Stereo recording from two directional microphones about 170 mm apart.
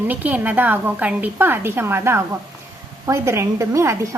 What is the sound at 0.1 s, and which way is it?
A woman's voice, 10° right (ahead or behind).